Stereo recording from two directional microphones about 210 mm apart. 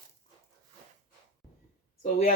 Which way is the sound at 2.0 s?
35° left (ahead or behind).